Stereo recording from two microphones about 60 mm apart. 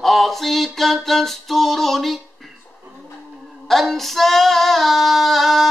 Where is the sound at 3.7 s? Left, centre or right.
Centre.